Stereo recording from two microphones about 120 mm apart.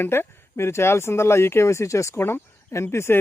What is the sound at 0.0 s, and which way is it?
Speech, 20° left (ahead or behind).